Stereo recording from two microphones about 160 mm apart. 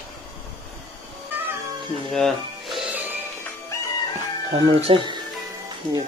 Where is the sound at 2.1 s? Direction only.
Centre (ahead or behind).